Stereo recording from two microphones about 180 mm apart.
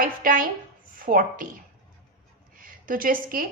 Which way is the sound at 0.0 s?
50° right (ahead or behind).